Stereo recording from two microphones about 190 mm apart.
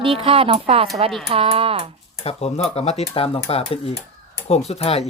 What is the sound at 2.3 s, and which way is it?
Speech, 35° left (ahead or behind).